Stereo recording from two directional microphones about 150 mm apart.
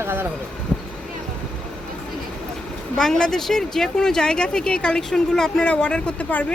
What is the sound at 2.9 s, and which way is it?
Speech, 5° left (ahead or behind).